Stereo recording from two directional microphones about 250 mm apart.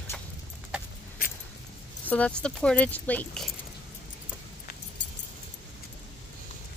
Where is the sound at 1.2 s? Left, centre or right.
Left.